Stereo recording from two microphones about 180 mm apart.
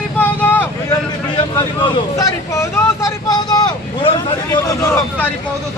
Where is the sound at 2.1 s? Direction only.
20° left (ahead or behind).